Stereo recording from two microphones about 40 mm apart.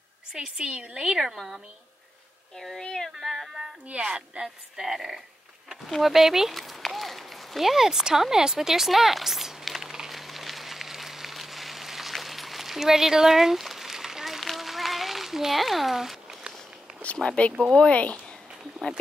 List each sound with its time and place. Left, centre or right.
0.6 s a woman's voice: right
1.0 s speech: centre
2.8 s speech: centre
3.1 s speech: centre
4.0 s speech: centre
6.5 s a sound: centre
17.0 s a sound: left
17.7 s speech: left